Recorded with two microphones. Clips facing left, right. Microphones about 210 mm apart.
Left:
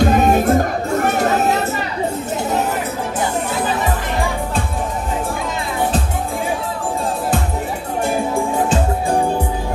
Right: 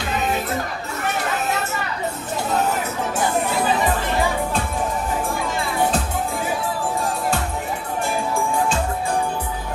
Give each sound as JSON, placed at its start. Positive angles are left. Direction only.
{"t": 0.0, "sound": "music", "side_deg": 45}